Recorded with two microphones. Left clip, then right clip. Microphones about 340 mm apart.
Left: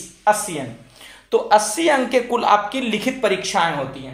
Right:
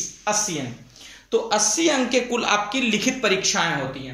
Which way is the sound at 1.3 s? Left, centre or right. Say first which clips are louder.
Left 5 dB; left.